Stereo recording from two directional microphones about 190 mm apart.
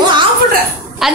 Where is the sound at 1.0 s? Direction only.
Centre (ahead or behind).